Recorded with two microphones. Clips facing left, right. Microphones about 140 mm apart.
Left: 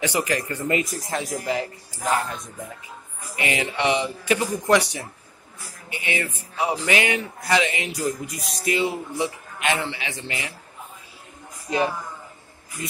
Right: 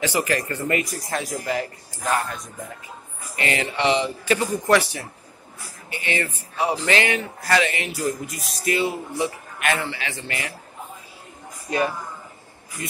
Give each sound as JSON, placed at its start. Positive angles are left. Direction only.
{"t": 0.0, "sound": "speech", "side_deg": 15}